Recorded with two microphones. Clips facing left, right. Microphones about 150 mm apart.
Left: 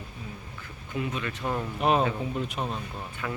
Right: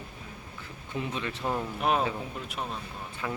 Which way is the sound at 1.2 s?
25° right (ahead or behind).